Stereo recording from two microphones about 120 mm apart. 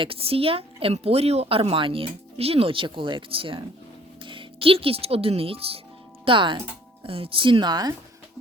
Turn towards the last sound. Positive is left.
turn(degrees=-35)  # may be behind; listen again after turning